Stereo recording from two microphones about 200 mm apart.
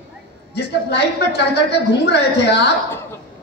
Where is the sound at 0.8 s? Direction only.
55° left (ahead or behind).